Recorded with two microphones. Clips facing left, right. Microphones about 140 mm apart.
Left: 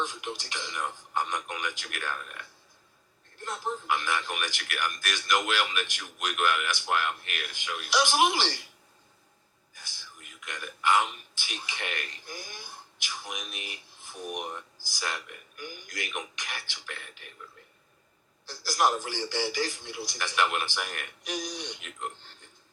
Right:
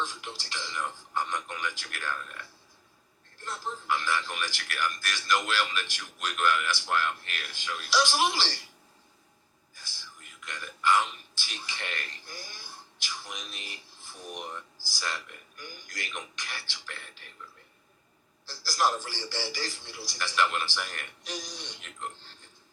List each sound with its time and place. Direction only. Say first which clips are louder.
0.0 s a man's voice: left 3 dB; 15° left (ahead or behind)
9.7 s a man's voice: left 1 dB; 15° left (ahead or behind)
18.4 s a man's voice: left 2 dB; 20° left (ahead or behind)